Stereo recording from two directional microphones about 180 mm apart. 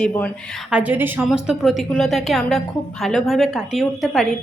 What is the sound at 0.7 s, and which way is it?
A woman's voice, 10° right (ahead or behind).